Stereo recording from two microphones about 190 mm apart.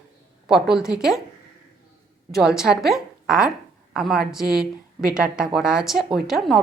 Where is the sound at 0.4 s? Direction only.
5° right (ahead or behind).